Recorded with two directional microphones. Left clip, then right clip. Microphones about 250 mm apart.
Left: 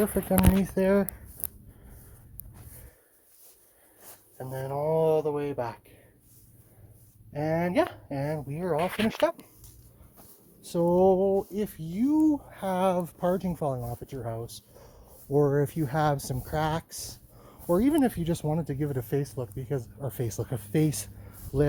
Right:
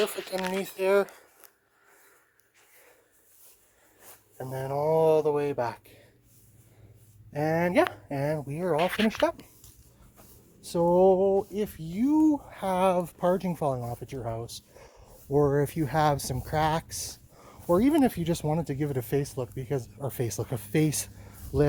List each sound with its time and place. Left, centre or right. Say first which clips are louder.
0.6 s speech: right 1 dB; centre
4.4 s speech: right 2 dB; centre
7.3 s speech: right 2 dB; centre
10.6 s speech: right 1 dB; centre